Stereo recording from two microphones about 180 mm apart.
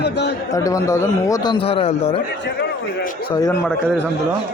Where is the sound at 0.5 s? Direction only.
20° left (ahead or behind).